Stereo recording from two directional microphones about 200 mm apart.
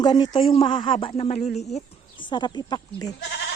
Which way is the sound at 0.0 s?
20° left (ahead or behind).